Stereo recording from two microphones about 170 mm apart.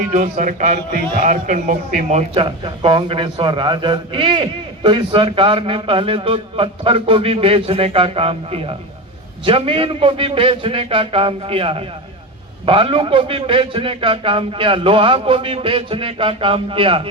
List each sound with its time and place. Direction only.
0.1 s a man's voice: 50° right (ahead or behind); by 17.0 s 30° right (ahead or behind)